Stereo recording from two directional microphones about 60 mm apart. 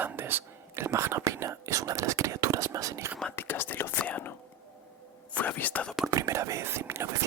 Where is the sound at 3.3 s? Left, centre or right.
Left.